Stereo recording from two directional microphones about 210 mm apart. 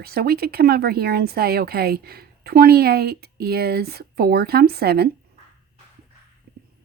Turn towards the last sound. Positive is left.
turn(degrees=-50)  # may be behind; listen again after turning